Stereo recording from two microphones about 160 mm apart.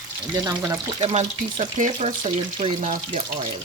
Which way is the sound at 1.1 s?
45° right (ahead or behind).